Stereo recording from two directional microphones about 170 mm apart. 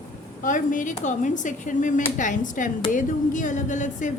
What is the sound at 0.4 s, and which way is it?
A woman's voice, 50° left (ahead or behind).